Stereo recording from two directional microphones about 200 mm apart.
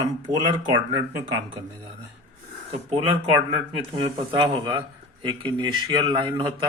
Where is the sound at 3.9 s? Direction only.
25° right (ahead or behind).